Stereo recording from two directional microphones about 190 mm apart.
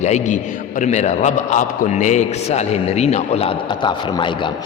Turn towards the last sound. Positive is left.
turn(degrees=25)  # may be behind; listen again after turning